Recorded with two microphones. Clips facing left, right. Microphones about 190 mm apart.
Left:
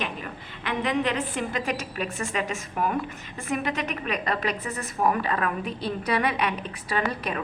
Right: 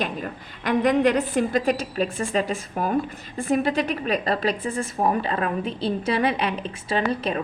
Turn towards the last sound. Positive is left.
turn(degrees=-30)  # may be behind; listen again after turning